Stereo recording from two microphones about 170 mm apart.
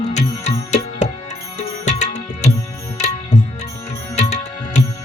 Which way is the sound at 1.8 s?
45° left (ahead or behind).